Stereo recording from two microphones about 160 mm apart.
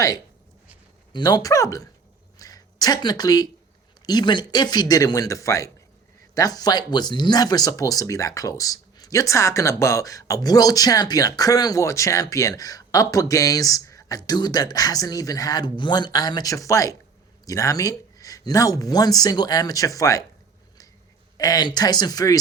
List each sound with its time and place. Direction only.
1.1 s speech: 25° left (ahead or behind)
21.3 s speech: 25° left (ahead or behind)